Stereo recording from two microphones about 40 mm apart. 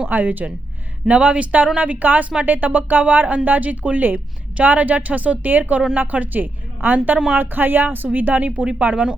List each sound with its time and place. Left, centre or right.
0.1 s speech: right
1.0 s a woman's voice: right
8.4 s speech: right